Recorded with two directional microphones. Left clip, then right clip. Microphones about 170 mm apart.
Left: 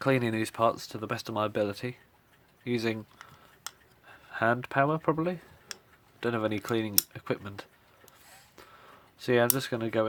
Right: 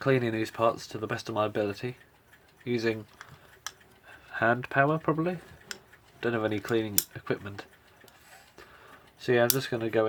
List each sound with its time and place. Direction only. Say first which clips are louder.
0.0 s speech: right 1 dB; 45° left (ahead or behind)
4.0 s speech: right 1 dB; 35° left (ahead or behind)
9.1 s speech: right 1 dB; 45° left (ahead or behind)